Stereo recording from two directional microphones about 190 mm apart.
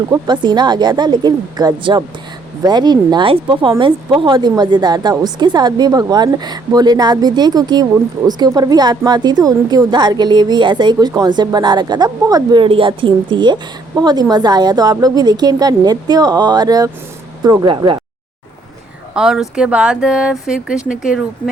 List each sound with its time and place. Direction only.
0.3 s a woman's voice: 25° right (ahead or behind)
19.1 s speech: 5° right (ahead or behind)